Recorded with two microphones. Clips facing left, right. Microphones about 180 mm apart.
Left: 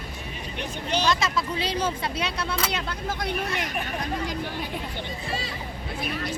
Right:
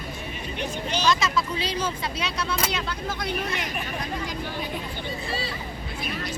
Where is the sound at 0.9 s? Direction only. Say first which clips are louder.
Even; 55° left (ahead or behind).